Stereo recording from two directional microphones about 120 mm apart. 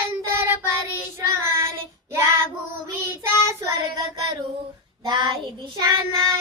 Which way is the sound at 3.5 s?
25° right (ahead or behind).